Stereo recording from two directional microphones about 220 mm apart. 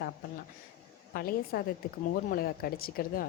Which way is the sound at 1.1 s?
45° left (ahead or behind).